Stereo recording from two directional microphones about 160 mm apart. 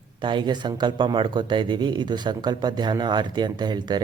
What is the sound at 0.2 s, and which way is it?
Speech, 30° right (ahead or behind).